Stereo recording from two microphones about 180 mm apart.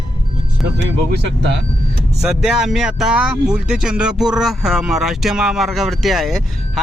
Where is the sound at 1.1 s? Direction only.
75° right (ahead or behind).